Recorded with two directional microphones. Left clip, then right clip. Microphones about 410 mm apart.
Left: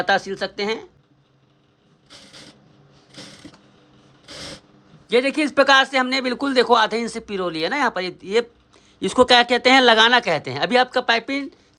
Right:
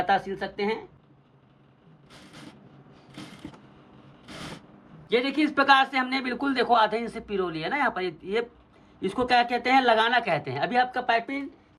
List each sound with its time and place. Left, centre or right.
0.0 s speech: centre
5.0 s a man's voice: centre